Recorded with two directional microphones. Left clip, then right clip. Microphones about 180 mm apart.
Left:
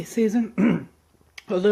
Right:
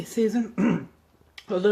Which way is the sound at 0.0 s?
25° left (ahead or behind).